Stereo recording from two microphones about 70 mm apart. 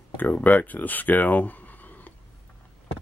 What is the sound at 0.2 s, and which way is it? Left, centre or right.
Speech, left.